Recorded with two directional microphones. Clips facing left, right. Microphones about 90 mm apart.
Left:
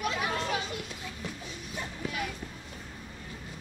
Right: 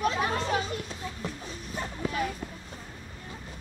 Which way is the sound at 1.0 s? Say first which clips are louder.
Right 4 dB; 35° right (ahead or behind).